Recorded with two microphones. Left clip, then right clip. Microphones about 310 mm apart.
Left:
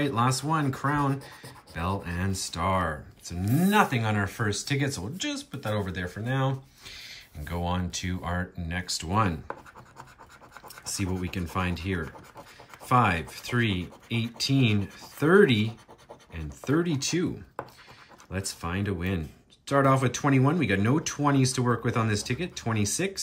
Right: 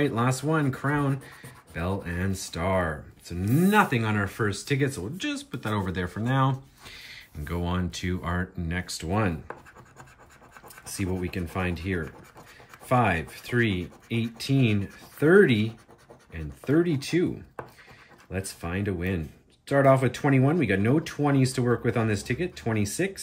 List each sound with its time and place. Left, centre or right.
0.0 s speech: centre
10.8 s speech: centre